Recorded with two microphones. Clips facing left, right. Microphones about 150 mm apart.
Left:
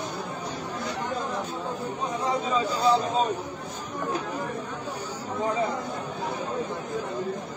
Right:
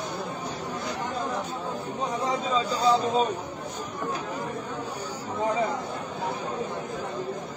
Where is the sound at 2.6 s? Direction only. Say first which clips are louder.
Even; 15° left (ahead or behind).